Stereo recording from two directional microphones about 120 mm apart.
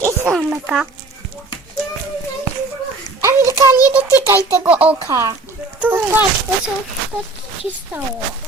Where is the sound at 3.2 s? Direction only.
25° right (ahead or behind).